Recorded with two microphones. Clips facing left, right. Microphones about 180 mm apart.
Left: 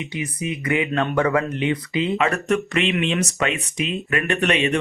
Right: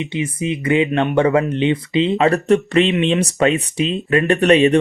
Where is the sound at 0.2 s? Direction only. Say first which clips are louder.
Right 5 dB; 25° right (ahead or behind).